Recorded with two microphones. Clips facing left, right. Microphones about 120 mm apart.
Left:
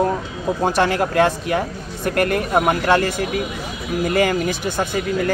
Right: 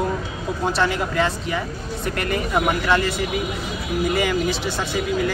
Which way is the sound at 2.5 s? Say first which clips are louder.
Left 2 dB; 40° left (ahead or behind).